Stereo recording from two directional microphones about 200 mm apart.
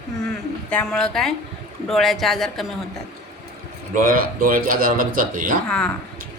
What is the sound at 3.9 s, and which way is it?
A man's voice, 45° right (ahead or behind).